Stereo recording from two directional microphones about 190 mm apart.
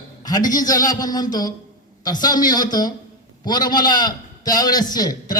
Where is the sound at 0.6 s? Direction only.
20° left (ahead or behind).